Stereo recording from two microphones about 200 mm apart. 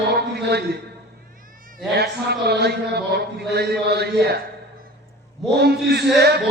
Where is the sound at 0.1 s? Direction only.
55° right (ahead or behind).